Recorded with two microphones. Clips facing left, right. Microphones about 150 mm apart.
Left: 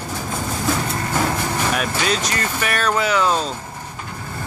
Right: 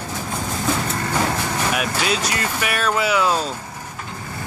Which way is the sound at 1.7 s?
5° right (ahead or behind).